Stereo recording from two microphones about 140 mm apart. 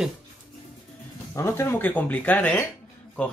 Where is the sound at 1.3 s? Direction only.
20° left (ahead or behind).